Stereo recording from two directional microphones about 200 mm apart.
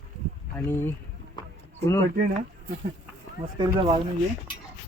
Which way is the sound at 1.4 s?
20° left (ahead or behind).